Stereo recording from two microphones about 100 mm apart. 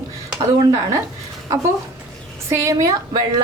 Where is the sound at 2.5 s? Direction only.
30° right (ahead or behind).